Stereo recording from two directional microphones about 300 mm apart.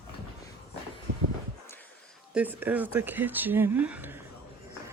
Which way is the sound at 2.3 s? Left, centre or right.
Centre.